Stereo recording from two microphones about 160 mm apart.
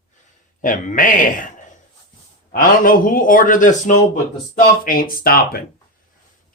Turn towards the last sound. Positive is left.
turn(degrees=70)  # may be behind; listen again after turning